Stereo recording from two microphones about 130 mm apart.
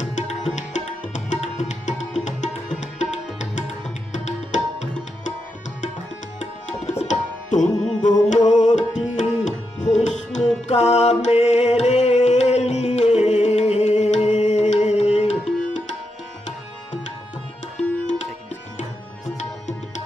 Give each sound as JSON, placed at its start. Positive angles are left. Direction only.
{"t": 0.0, "sound": "music", "side_deg": 65}
{"t": 6.4, "sound": "tabla", "side_deg": 60}
{"t": 9.4, "sound": "music", "side_deg": 65}
{"t": 18.0, "sound": "music", "side_deg": 65}